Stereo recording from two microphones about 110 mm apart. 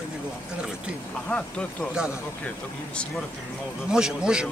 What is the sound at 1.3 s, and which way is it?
Speech, 15° left (ahead or behind).